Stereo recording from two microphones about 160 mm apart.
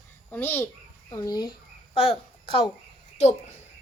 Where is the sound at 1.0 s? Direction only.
25° left (ahead or behind).